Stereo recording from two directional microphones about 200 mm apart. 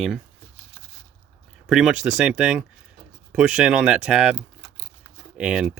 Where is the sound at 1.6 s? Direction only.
Centre (ahead or behind).